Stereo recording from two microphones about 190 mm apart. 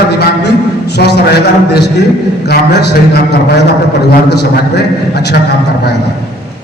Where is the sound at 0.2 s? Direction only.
60° left (ahead or behind).